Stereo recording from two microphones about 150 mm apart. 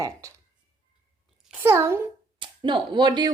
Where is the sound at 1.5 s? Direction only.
15° right (ahead or behind).